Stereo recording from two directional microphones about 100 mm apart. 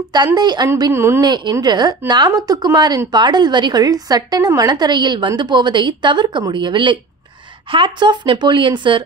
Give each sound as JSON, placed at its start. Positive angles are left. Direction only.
{"t": 0.1, "sound": "a woman's voice", "side_deg": -45}
{"t": 0.9, "sound": "speech", "side_deg": -25}
{"t": 1.2, "sound": "a woman's voice", "side_deg": -45}